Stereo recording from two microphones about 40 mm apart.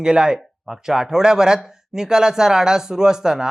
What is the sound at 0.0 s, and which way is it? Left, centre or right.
Speech, centre.